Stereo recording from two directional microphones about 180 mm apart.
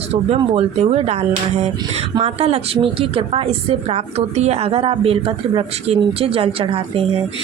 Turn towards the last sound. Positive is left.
turn(degrees=-30)  # may be behind; listen again after turning